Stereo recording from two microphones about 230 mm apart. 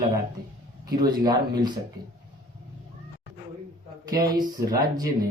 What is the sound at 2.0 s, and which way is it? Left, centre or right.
Speech, right.